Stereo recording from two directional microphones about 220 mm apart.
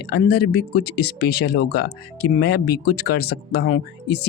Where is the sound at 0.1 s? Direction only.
45° left (ahead or behind).